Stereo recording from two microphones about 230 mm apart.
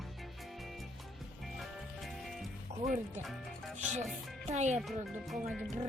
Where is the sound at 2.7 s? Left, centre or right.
Right.